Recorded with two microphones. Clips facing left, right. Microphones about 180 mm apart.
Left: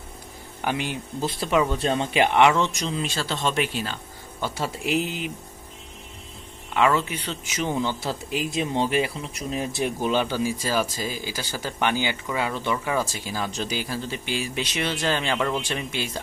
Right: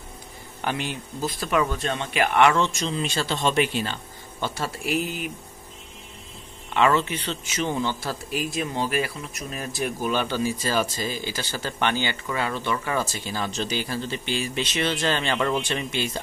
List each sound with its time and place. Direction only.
0.7 s a man's voice: 15° left (ahead or behind)
1.2 s speech: 25° left (ahead or behind)
2.3 s a man's voice: 15° left (ahead or behind)
3.0 s speech: centre (ahead or behind)
4.6 s speech: 25° left (ahead or behind)
6.7 s a man's voice: 5° left (ahead or behind)